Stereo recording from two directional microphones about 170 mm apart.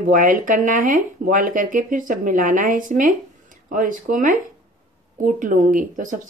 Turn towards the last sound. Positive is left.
turn(degrees=-50)  # may be behind; listen again after turning